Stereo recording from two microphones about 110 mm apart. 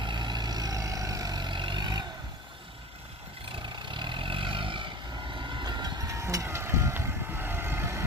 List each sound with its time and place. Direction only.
0.0 s vehicle: 45° right (ahead or behind)
3.5 s vehicle: 45° right (ahead or behind); by 8.0 s 20° right (ahead or behind)